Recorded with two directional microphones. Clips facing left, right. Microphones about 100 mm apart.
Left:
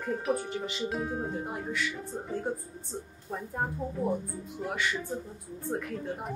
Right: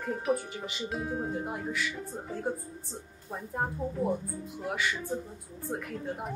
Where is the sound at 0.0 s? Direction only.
Centre (ahead or behind).